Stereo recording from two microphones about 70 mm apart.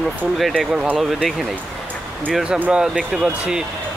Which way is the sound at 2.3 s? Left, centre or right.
Centre.